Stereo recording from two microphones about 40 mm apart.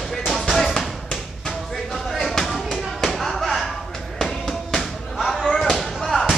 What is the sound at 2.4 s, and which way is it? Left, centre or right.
Thump, centre.